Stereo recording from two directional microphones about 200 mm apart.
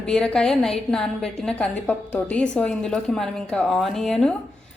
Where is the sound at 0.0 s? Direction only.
5° left (ahead or behind).